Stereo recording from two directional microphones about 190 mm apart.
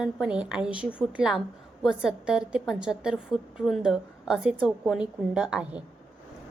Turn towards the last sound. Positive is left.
turn(degrees=-5)  # may be behind; listen again after turning